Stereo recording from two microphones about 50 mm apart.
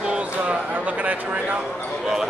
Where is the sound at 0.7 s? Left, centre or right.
Right.